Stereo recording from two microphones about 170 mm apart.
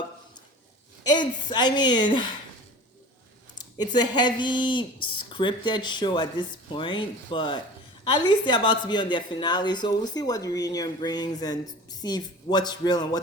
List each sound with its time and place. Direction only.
1.0 s speech: 25° left (ahead or behind)
3.6 s speech: 25° left (ahead or behind)